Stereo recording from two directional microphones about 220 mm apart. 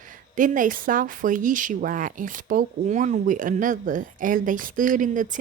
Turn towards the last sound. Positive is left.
turn(degrees=-35)  # may be behind; listen again after turning